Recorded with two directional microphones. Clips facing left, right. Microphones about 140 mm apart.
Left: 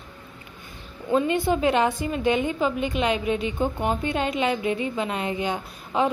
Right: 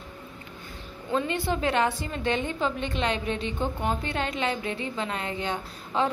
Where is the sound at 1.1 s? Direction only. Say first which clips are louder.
Left 5 dB; 15° left (ahead or behind).